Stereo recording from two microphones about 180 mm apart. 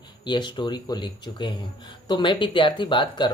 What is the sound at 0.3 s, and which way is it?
Speech, 25° left (ahead or behind).